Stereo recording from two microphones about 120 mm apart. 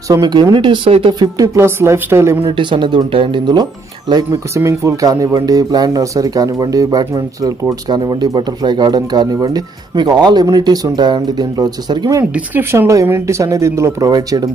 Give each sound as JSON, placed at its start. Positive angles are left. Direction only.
{"t": 0.2, "sound": "speech", "side_deg": -40}
{"t": 1.2, "sound": "speech", "side_deg": -25}
{"t": 2.4, "sound": "speech", "side_deg": -45}
{"t": 4.6, "sound": "speech", "side_deg": -25}
{"t": 12.4, "sound": "speech", "side_deg": -20}